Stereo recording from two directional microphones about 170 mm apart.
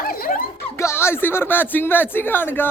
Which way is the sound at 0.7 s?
15° left (ahead or behind).